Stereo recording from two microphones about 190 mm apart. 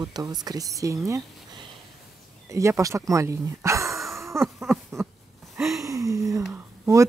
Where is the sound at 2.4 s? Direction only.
15° right (ahead or behind).